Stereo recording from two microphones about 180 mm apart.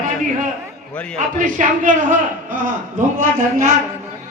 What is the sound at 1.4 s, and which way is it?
Speech, 45° right (ahead or behind).